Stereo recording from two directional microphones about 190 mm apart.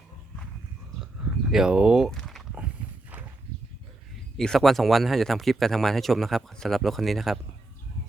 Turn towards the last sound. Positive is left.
turn(degrees=0)  # may be behind; listen again after turning